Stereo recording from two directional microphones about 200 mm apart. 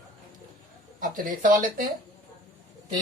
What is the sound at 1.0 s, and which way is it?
Speech, 40° right (ahead or behind).